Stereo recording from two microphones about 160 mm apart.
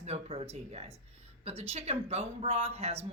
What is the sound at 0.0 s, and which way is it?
A man's voice, 40° right (ahead or behind).